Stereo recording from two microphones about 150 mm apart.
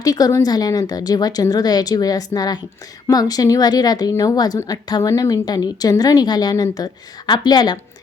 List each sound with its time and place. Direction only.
0.0 s a woman's voice: 25° left (ahead or behind)